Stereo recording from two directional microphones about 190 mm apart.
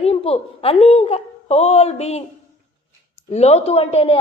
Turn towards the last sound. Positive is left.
turn(degrees=35)  # may be behind; listen again after turning